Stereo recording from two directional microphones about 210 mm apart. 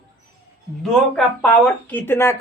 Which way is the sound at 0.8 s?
5° left (ahead or behind).